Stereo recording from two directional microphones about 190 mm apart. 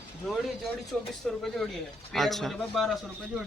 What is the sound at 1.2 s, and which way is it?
Speech, centre (ahead or behind).